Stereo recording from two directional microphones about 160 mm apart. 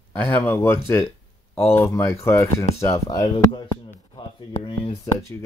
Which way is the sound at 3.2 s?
30° left (ahead or behind).